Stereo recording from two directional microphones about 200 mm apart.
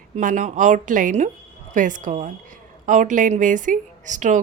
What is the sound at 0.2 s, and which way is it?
A woman's voice, 40° right (ahead or behind).